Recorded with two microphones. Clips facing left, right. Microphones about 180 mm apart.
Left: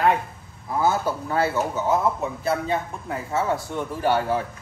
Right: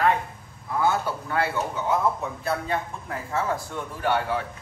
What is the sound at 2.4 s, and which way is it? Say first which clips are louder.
A man's voice: left 3 dB; 25° left (ahead or behind).